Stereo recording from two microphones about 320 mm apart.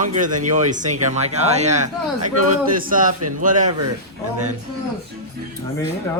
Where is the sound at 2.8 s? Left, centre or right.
Right.